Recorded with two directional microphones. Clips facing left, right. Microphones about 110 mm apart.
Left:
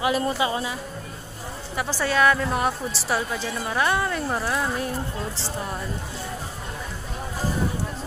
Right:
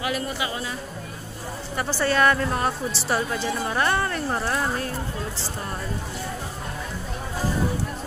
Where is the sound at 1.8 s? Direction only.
5° left (ahead or behind).